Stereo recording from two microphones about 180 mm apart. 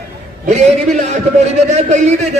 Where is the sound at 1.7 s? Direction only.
40° right (ahead or behind).